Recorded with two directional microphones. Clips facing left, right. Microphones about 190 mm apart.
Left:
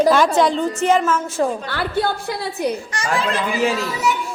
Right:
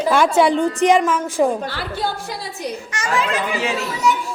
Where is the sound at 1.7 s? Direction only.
60° left (ahead or behind).